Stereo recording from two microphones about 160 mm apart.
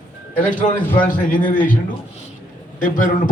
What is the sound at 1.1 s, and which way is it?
Speech, 60° left (ahead or behind).